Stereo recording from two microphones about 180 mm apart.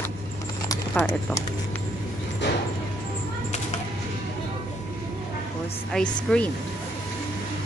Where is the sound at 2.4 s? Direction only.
80° left.